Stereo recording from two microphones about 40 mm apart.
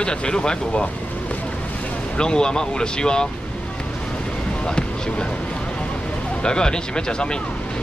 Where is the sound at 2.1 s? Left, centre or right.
Left.